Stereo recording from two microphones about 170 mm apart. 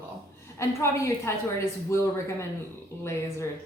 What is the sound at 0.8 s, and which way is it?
Speech, 15° left (ahead or behind).